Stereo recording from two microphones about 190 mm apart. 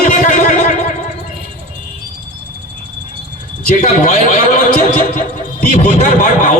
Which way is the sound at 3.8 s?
35° left (ahead or behind).